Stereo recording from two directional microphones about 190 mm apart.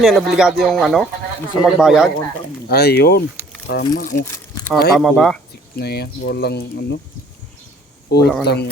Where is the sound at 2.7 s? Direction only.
60° left (ahead or behind).